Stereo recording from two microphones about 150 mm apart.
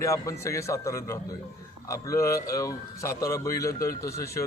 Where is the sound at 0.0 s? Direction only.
20° left (ahead or behind).